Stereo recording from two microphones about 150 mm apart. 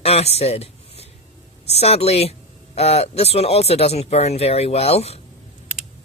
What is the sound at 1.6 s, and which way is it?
Speech, 45° left (ahead or behind).